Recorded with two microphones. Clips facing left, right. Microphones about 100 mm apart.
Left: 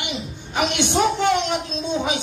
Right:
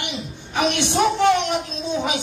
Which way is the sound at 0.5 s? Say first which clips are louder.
Even; 20° left (ahead or behind).